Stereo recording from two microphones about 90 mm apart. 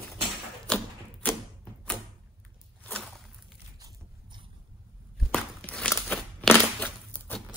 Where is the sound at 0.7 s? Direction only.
10° left (ahead or behind).